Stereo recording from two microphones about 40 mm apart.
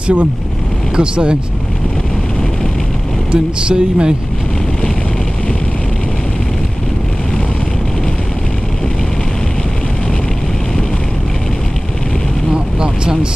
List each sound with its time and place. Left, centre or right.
0.0 s speech: right
3.3 s speech: right
12.8 s vehicle: right